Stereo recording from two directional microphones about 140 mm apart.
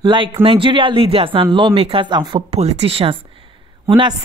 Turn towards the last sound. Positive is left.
turn(degrees=-35)  # may be behind; listen again after turning